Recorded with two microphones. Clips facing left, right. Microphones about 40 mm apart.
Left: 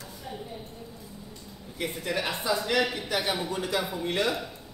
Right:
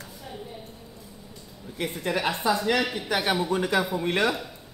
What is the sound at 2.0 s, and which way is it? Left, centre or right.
Speech, right.